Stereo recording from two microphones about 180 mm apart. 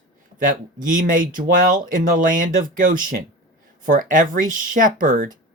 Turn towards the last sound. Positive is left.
turn(degrees=-45)  # may be behind; listen again after turning